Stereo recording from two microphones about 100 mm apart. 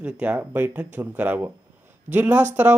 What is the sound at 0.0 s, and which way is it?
Speech, 15° right (ahead or behind).